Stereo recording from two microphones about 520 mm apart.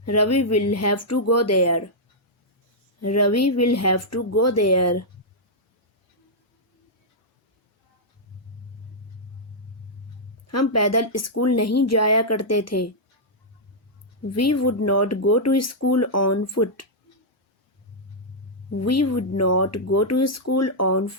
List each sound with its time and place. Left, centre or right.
0.0 s speech: left
3.0 s speech: left
10.4 s speech: left
14.3 s speech: left
18.8 s speech: left